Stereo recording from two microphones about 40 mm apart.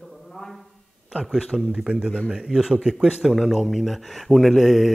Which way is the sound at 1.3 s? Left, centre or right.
Centre.